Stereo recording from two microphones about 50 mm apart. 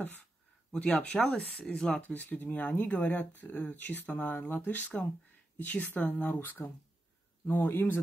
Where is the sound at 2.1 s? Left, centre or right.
Left.